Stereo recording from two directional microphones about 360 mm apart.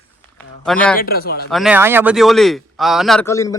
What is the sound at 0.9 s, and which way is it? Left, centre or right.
Speech, left.